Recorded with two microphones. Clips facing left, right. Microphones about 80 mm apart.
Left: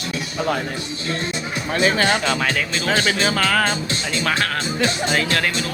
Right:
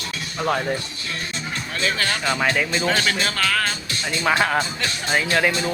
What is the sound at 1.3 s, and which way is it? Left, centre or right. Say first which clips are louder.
Music: left 5 dB; centre.